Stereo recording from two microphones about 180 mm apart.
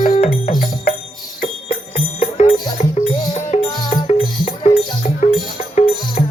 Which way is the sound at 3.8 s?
25° left (ahead or behind).